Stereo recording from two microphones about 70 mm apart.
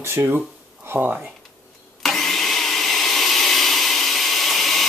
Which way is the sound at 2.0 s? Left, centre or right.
Centre.